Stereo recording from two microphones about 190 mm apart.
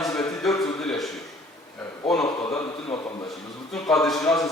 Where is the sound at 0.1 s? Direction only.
5° left (ahead or behind).